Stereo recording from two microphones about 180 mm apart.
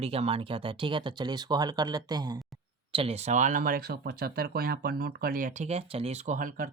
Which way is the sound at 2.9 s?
35° right (ahead or behind).